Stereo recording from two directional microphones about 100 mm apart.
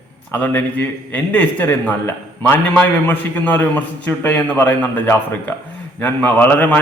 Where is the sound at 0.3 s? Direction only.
20° left (ahead or behind).